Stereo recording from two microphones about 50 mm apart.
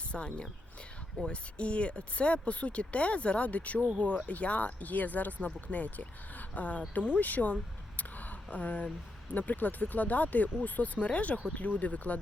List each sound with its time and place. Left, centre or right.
0.1 s speech: left
7.9 s a sound: left
9.3 s speech: left